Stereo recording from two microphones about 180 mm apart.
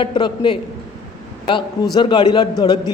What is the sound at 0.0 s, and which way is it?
A man's voice, 25° left (ahead or behind).